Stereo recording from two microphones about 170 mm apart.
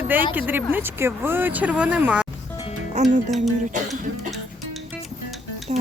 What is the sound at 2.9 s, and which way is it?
Speech, 45° right (ahead or behind).